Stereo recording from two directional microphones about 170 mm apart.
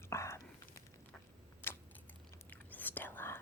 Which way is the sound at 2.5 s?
10° left (ahead or behind).